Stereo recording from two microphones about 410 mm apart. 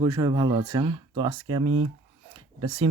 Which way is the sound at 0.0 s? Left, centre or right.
Centre.